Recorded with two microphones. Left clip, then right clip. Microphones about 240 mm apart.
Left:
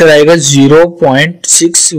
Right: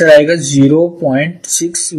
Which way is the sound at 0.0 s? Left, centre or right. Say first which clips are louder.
Left 3 dB; left.